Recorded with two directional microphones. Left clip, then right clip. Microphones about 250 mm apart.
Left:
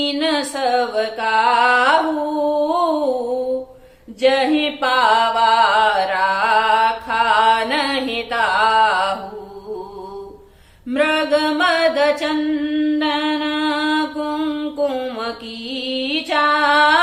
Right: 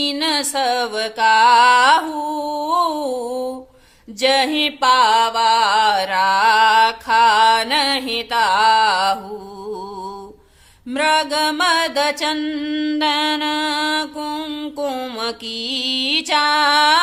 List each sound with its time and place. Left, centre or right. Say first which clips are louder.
0.0 s music: even; right
4.2 s music: even; right
10.8 s mantra: even; right